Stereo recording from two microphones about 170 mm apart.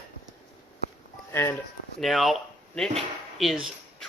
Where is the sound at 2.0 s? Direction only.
Centre (ahead or behind).